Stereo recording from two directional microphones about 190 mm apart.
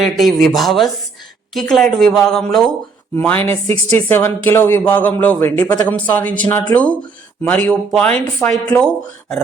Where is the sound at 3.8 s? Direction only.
10° left (ahead or behind).